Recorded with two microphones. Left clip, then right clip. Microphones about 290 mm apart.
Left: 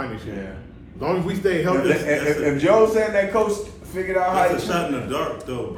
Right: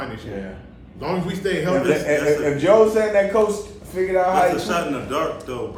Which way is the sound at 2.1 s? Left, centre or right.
Right.